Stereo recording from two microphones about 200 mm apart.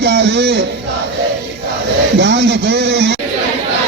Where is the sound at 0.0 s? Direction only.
60° right (ahead or behind).